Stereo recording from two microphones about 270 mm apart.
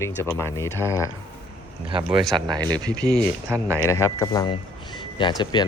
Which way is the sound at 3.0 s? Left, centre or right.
Centre.